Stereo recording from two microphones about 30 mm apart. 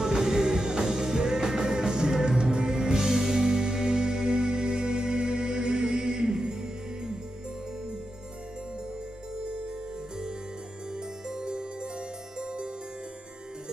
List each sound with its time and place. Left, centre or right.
0.0 s music: right
11.0 s music: right